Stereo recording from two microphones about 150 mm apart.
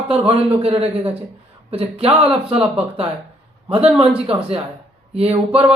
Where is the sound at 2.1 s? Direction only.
5° right (ahead or behind).